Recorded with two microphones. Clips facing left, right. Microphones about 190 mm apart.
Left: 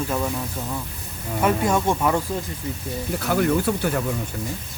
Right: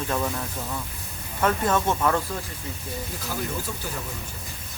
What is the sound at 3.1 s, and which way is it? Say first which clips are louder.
Speech: left 13 dB; 65° left (ahead or behind).